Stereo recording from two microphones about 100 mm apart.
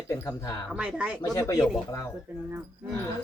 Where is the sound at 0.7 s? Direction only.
10° right (ahead or behind).